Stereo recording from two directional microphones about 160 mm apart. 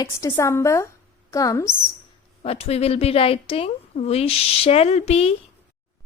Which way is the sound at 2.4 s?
40° left (ahead or behind).